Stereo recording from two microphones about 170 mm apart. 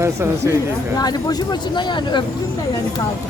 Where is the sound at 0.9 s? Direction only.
25° left (ahead or behind).